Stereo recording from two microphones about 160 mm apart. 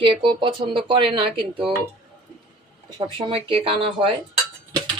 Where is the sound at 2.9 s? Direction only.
30° right (ahead or behind).